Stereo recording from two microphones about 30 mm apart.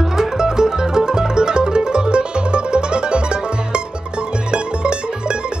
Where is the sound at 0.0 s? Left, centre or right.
Centre.